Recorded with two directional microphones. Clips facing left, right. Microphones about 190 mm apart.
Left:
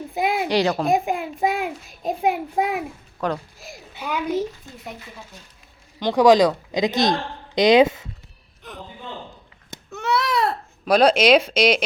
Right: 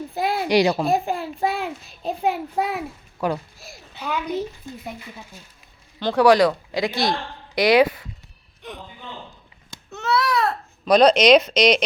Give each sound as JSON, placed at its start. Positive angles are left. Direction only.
{"t": 0.1, "sound": "a sound", "side_deg": 15}
{"t": 0.4, "sound": "speech", "side_deg": -15}
{"t": 0.9, "sound": "a child's voice", "side_deg": 15}
{"t": 3.2, "sound": "speech", "side_deg": -10}
{"t": 3.6, "sound": "a child's voice", "side_deg": 15}
{"t": 6.0, "sound": "speech", "side_deg": 15}
{"t": 9.6, "sound": "a sound", "side_deg": 20}
{"t": 10.8, "sound": "a child's voice", "side_deg": 5}